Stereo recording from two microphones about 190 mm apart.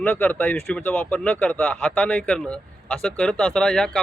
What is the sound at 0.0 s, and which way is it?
Speech, 10° left (ahead or behind).